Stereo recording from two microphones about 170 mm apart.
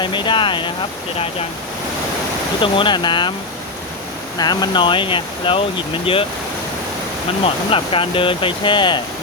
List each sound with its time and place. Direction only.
0.0 s speech: 25° left (ahead or behind)
2.6 s speech: 30° left (ahead or behind)
4.4 s speech: 25° left (ahead or behind)
7.4 s speech: 30° left (ahead or behind)